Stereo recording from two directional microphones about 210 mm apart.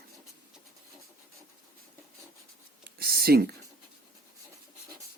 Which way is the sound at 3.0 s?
50° right (ahead or behind).